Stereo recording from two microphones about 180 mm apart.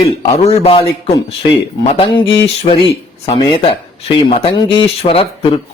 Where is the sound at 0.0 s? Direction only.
35° left (ahead or behind).